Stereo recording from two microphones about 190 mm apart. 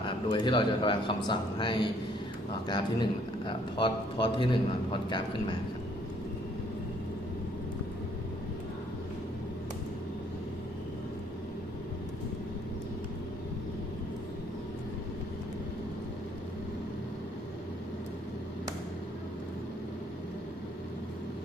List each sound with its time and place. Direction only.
0.0 s a man's voice: 25° left (ahead or behind)